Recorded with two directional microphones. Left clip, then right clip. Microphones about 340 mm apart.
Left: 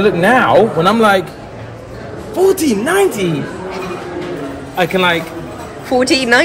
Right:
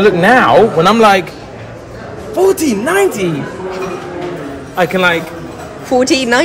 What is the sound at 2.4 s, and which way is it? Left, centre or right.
Speech, centre.